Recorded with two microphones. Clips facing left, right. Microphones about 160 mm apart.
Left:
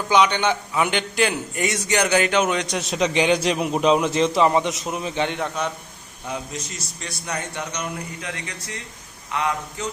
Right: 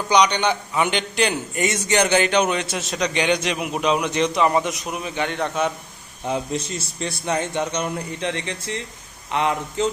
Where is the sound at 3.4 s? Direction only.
35° left (ahead or behind).